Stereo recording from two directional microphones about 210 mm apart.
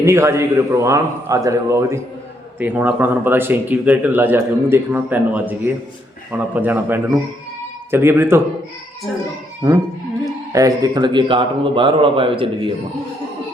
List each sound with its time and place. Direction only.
0.0 s speech: 15° right (ahead or behind)
10.5 s a man's voice: 15° right (ahead or behind)